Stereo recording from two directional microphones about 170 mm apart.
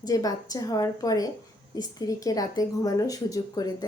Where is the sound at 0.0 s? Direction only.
20° left (ahead or behind).